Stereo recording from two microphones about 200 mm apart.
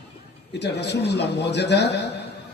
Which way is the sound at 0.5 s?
55° left (ahead or behind).